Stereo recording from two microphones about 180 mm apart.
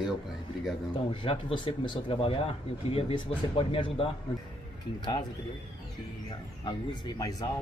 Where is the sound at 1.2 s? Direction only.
25° left (ahead or behind).